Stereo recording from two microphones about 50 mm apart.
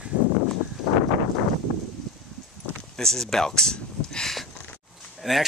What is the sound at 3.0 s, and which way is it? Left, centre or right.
Speech, centre.